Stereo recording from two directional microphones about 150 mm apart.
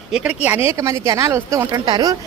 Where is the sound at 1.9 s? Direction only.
25° right (ahead or behind).